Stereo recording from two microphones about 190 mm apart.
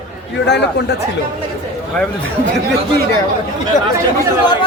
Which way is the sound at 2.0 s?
5° left (ahead or behind).